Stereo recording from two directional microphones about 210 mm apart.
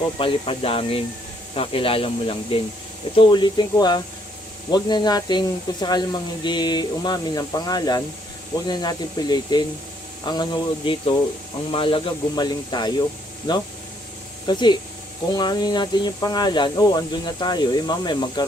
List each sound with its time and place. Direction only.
0.2 s speech: 25° left (ahead or behind)